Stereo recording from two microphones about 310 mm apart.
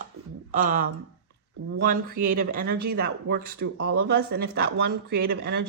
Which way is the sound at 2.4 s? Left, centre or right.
Right.